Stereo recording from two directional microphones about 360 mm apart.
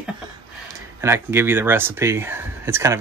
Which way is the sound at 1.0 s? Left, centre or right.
Centre.